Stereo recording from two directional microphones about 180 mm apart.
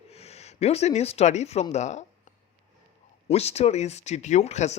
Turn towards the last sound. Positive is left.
turn(degrees=40)  # may be behind; listen again after turning